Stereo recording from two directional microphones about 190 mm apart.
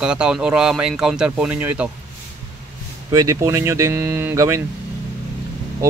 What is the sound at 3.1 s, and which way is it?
Speech, 15° right (ahead or behind).